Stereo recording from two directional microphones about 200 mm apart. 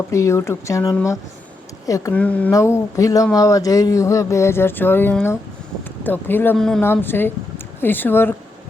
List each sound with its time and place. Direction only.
0.1 s speech: 15° left (ahead or behind)